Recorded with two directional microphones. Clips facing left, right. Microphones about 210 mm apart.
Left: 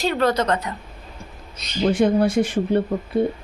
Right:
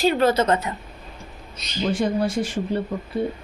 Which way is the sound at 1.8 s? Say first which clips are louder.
Left 5 dB; 55° left (ahead or behind).